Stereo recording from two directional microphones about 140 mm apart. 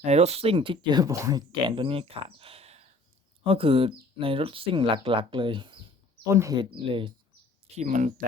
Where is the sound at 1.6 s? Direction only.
35° right (ahead or behind).